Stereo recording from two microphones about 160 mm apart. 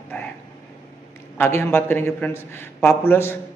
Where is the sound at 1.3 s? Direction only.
15° left (ahead or behind).